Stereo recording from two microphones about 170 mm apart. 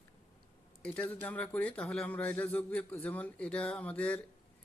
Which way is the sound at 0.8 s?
10° left (ahead or behind).